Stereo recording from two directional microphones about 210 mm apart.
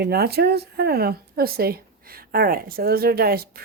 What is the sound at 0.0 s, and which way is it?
Speech, 50° right (ahead or behind).